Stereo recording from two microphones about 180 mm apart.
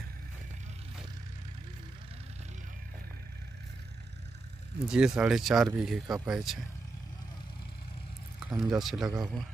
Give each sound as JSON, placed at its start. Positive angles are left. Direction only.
{"t": 4.8, "sound": "speech", "side_deg": -5}
{"t": 8.5, "sound": "speech", "side_deg": -5}
{"t": 9.0, "sound": "speech", "side_deg": -20}